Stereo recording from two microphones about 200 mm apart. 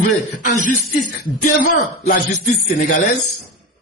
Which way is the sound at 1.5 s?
55° left (ahead or behind).